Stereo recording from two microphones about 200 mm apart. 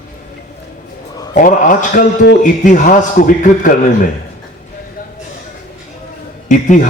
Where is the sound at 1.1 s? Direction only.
20° left (ahead or behind).